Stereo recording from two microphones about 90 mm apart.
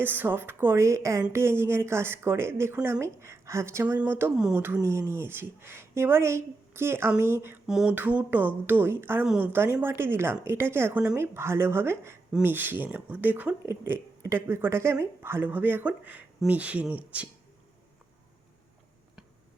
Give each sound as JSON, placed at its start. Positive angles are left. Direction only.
{"t": 0.0, "sound": "speech", "side_deg": -20}
{"t": 3.8, "sound": "speech", "side_deg": -20}
{"t": 7.7, "sound": "speech", "side_deg": -5}
{"t": 7.9, "sound": "speech", "side_deg": -20}